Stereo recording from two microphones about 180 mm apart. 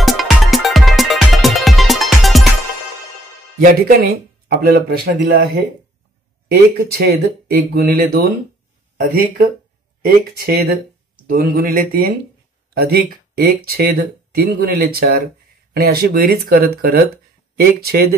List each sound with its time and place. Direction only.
0.0 s music: centre (ahead or behind)
3.5 s speech: 55° right (ahead or behind)
6.8 s speech: 60° right (ahead or behind)